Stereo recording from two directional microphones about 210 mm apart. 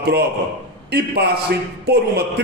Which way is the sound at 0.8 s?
50° right (ahead or behind).